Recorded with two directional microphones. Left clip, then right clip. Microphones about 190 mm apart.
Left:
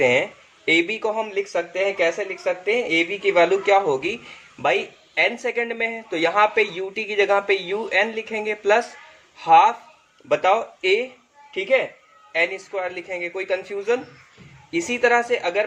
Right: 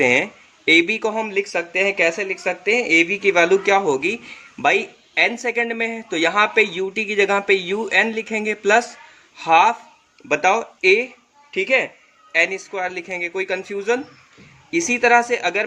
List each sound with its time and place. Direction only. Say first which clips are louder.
0.0 s speech: right 2 dB; 35° right (ahead or behind)
12.3 s speech: right 3 dB; 35° right (ahead or behind)